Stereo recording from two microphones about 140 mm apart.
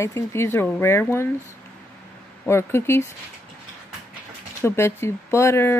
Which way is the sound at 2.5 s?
20° left (ahead or behind).